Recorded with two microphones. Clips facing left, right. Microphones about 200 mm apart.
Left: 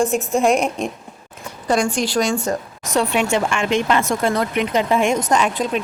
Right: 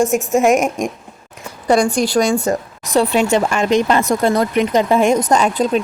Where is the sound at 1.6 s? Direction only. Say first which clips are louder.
Right 5 dB; 35° right (ahead or behind).